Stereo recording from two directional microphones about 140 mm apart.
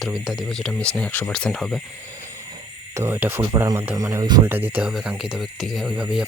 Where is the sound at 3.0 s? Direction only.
15° right (ahead or behind).